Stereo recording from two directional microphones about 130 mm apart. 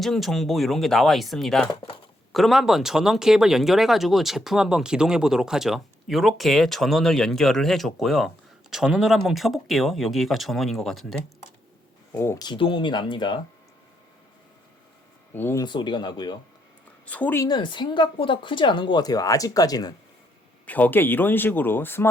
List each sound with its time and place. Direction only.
0.0 s speech: centre (ahead or behind)
12.1 s speech: 20° left (ahead or behind)
12.4 s speech: 40° left (ahead or behind)
15.3 s speech: 15° left (ahead or behind)
15.6 s speech: 35° left (ahead or behind)
17.1 s speech: 10° left (ahead or behind)
17.4 s speech: 35° left (ahead or behind)
20.7 s speech: 10° left (ahead or behind)